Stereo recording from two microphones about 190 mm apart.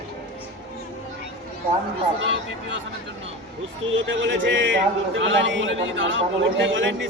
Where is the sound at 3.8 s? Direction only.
75° right (ahead or behind).